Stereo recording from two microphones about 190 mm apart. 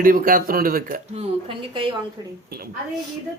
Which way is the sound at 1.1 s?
30° right (ahead or behind).